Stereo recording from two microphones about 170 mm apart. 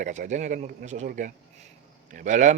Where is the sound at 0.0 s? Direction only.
45° right (ahead or behind).